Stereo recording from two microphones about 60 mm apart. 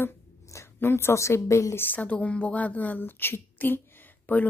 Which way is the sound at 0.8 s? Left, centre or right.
Left.